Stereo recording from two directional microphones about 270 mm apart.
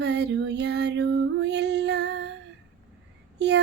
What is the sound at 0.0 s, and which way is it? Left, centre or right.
Female singing, right.